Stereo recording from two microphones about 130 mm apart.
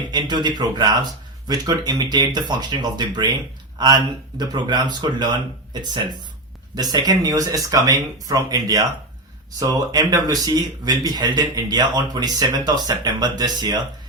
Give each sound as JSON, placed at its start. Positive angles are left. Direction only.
{"t": 0.1, "sound": "speech", "side_deg": -35}